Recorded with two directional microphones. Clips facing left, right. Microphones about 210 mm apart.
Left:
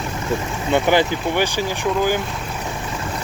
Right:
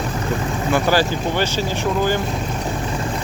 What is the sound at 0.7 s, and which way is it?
Speech, 20° left (ahead or behind).